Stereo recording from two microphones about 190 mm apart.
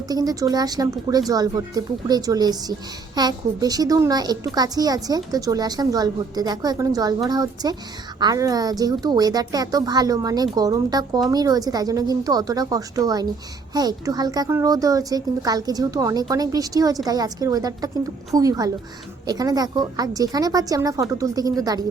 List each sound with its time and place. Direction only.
0.1 s a woman's voice: 20° right (ahead or behind)